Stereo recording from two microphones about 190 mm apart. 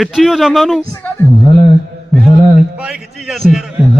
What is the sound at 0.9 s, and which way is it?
Speech, 15° left (ahead or behind).